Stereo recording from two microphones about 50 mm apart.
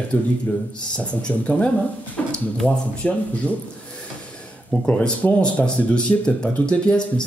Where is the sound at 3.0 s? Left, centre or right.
Centre.